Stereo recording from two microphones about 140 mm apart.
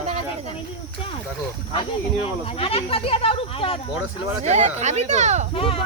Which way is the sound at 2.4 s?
45° left (ahead or behind).